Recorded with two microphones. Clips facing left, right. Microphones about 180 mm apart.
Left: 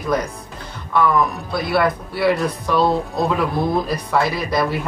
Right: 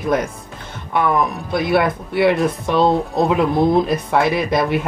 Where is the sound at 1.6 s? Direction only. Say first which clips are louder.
Right 1 dB; 20° right (ahead or behind).